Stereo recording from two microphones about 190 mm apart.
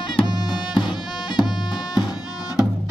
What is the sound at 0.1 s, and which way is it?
Music, 20° left (ahead or behind).